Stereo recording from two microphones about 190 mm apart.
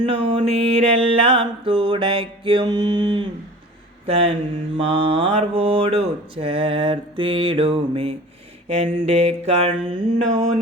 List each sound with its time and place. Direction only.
0.0 s speech: 25° right (ahead or behind)
4.0 s mantra: 30° right (ahead or behind)
4.8 s speech: 30° right (ahead or behind)
8.6 s mantra: 35° right (ahead or behind)